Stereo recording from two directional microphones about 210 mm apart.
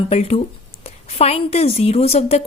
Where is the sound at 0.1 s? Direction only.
30° left (ahead or behind).